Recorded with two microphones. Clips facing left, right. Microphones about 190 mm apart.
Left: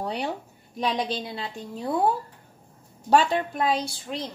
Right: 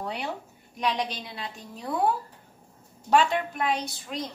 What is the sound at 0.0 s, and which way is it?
A woman's voice, 35° left (ahead or behind).